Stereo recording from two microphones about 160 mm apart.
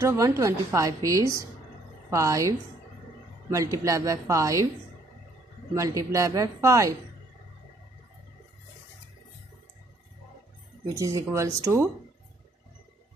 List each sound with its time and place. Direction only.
0.0 s a woman's voice: 15° right (ahead or behind)
5.8 s a woman's voice: 20° right (ahead or behind)
11.0 s a woman's voice: 20° right (ahead or behind)